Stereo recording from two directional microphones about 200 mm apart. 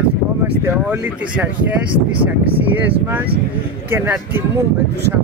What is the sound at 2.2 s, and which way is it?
Speech, 25° right (ahead or behind).